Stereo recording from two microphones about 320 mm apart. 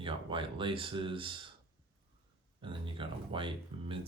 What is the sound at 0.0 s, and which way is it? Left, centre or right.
Speech, centre.